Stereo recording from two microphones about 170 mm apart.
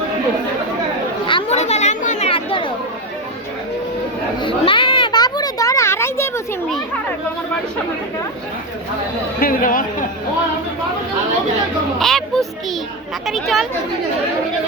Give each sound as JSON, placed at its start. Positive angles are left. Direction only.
{"t": 1.3, "sound": "chatter", "side_deg": 35}
{"t": 4.4, "sound": "children playing", "side_deg": 30}
{"t": 9.4, "sound": "speech", "side_deg": 55}
{"t": 11.9, "sound": "speech", "side_deg": 0}